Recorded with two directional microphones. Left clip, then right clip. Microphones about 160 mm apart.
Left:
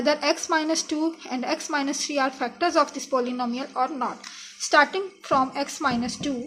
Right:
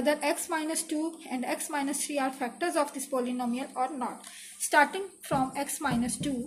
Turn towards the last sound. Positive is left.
turn(degrees=45)  # may be behind; listen again after turning